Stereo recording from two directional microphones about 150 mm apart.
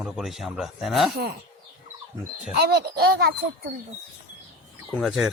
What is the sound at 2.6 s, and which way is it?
Speech, 90° right.